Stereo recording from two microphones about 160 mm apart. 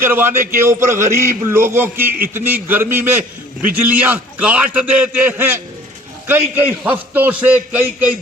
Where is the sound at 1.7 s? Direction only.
15° right (ahead or behind).